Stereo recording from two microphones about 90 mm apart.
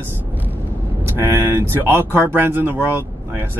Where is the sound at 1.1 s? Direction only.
25° right (ahead or behind).